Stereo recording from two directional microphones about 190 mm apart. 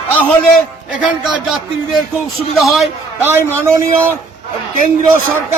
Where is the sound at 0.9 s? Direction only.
5° right (ahead or behind).